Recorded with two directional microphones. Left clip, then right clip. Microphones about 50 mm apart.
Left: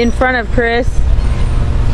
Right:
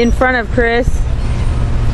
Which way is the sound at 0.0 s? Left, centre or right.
Right.